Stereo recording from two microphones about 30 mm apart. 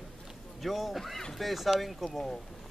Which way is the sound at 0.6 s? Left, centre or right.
Centre.